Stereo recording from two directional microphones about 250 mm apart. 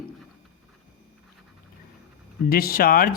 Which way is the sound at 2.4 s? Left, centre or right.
Left.